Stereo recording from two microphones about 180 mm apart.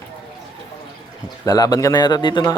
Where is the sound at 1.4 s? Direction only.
20° left (ahead or behind).